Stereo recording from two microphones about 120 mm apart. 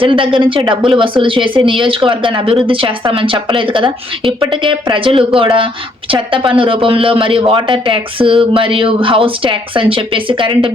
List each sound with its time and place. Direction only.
0.0 s speech: 45° right (ahead or behind)